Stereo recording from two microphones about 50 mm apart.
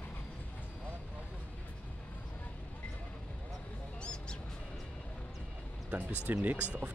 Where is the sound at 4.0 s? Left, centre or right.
Centre.